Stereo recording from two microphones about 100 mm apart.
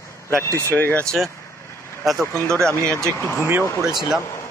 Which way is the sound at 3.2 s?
25° left (ahead or behind).